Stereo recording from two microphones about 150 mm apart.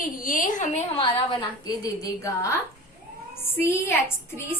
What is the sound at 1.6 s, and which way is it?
Speech, 25° left (ahead or behind).